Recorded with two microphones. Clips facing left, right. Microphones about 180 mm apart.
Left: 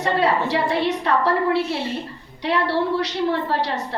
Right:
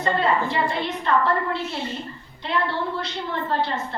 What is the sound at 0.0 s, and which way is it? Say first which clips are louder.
A woman's voice: left 2 dB; 75° left (ahead or behind).